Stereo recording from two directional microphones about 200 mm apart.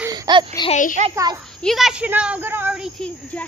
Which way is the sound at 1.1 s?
20° right (ahead or behind).